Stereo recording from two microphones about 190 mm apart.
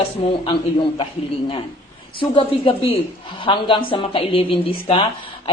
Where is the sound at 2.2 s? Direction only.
25° left (ahead or behind).